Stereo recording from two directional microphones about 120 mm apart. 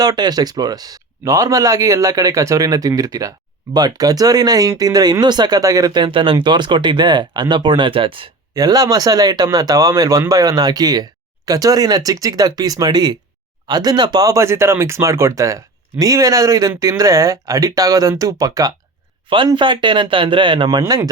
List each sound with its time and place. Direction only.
0.0 s speech: 35° right (ahead or behind)
8.5 s speech: 30° right (ahead or behind)
19.5 s speech: 40° right (ahead or behind)